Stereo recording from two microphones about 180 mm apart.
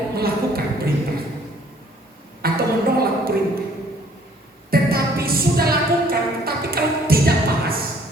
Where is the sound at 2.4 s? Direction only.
55° right (ahead or behind).